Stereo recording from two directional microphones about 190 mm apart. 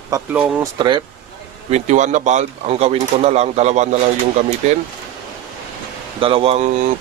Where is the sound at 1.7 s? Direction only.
40° right (ahead or behind).